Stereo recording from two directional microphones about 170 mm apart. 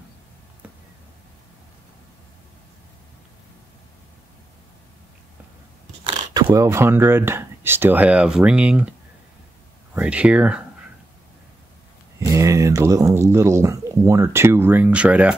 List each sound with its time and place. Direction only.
6.0 s speech: 20° right (ahead or behind)
9.9 s speech: 5° right (ahead or behind)
12.3 s speech: 20° right (ahead or behind)